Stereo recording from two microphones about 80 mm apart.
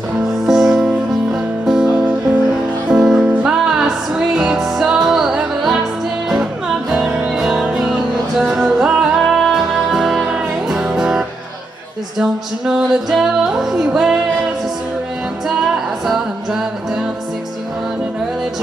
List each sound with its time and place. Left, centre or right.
0.5 s music: centre
7.1 s music: centre
15.4 s music: centre